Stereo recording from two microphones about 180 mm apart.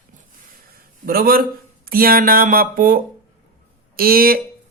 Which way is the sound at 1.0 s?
55° right (ahead or behind).